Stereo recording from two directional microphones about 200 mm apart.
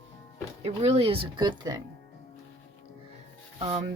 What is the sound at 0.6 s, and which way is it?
Speech, 30° right (ahead or behind).